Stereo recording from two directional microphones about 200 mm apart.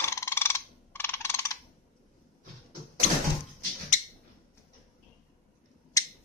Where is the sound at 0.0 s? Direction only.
15° left (ahead or behind).